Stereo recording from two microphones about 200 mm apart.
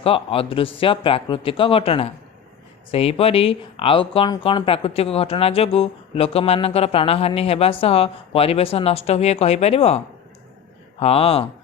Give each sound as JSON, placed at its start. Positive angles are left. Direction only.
{"t": 0.0, "sound": "speech", "side_deg": 30}
{"t": 11.0, "sound": "speech", "side_deg": 30}